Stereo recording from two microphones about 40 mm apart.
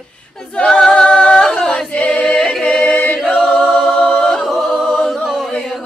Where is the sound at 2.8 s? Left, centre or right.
Left.